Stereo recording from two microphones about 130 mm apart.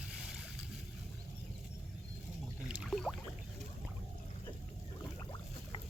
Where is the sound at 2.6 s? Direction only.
5° right (ahead or behind).